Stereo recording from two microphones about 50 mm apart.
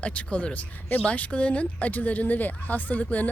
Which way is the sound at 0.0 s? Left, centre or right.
Left.